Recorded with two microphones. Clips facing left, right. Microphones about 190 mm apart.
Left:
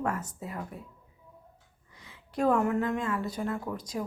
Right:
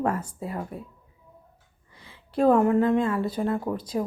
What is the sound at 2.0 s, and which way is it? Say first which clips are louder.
A woman's voice: right 6 dB; 30° right (ahead or behind).